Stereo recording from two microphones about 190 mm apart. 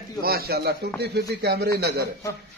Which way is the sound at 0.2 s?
55° right (ahead or behind).